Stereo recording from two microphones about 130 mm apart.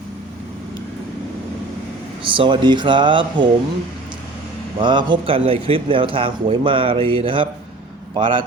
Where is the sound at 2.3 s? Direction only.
40° right (ahead or behind).